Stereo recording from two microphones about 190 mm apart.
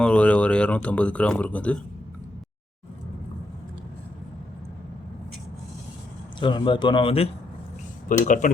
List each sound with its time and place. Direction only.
0.0 s speech: 5° left (ahead or behind)
6.4 s speech: 25° left (ahead or behind)
8.0 s speech: 45° left (ahead or behind)